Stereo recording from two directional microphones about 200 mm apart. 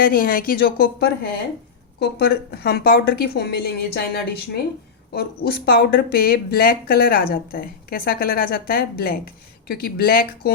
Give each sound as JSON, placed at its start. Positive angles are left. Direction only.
{"t": 0.0, "sound": "speech", "side_deg": 50}